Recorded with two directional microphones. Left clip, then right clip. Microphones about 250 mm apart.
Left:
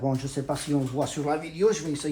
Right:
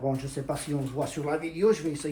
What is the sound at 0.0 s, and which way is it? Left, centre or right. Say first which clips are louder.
Speech: left 2 dB; left.